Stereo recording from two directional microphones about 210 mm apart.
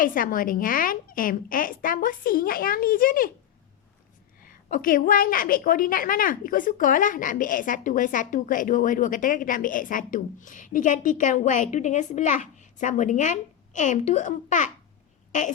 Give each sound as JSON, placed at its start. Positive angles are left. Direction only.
{"t": 0.0, "sound": "a woman's voice", "side_deg": 40}
{"t": 4.4, "sound": "a woman's voice", "side_deg": 40}